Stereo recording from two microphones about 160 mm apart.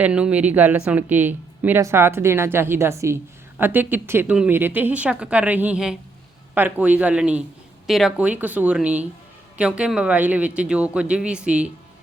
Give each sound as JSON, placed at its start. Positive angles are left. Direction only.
{"t": 0.0, "sound": "a woman's voice", "side_deg": -5}